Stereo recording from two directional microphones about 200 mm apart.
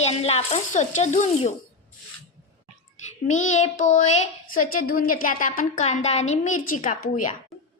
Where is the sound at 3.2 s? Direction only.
40° left (ahead or behind).